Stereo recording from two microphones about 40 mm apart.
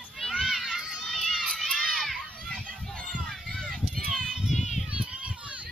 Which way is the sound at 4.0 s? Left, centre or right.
Left.